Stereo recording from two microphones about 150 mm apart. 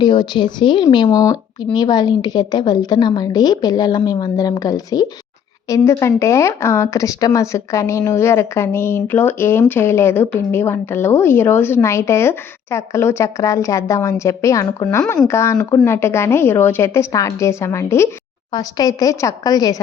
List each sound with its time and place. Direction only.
0.0 s speech: 30° left (ahead or behind)